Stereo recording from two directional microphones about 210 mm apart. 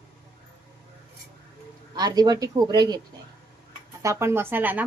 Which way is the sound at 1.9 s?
20° right (ahead or behind).